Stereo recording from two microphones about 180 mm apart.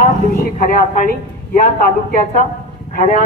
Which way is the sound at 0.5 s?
50° left (ahead or behind).